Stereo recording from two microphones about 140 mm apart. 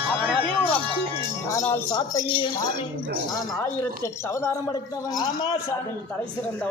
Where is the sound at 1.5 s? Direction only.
20° left (ahead or behind).